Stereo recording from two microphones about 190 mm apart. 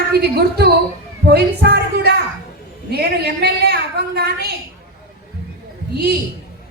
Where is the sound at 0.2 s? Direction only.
60° right (ahead or behind).